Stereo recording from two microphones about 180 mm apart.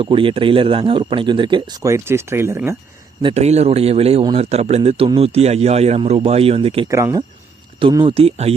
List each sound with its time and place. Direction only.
0.0 s speech: 30° right (ahead or behind); by 2.7 s 15° right (ahead or behind)
3.2 s a man's voice: 30° right (ahead or behind)
6.8 s a man's voice: 15° right (ahead or behind); by 8.5 s 35° right (ahead or behind)